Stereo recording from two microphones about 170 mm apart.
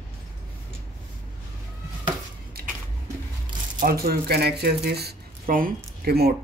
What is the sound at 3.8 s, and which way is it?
Speech, 60° right (ahead or behind).